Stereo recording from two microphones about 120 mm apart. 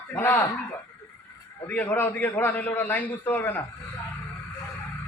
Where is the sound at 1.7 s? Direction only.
15° left (ahead or behind).